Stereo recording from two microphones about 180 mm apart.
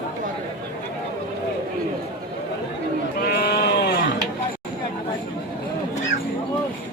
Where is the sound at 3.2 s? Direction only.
60° left (ahead or behind).